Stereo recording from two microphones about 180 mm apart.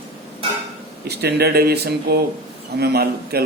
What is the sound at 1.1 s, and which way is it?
Speech, 65° right (ahead or behind).